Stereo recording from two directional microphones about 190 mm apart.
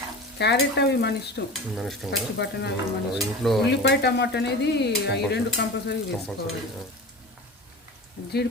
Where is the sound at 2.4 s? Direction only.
60° left (ahead or behind).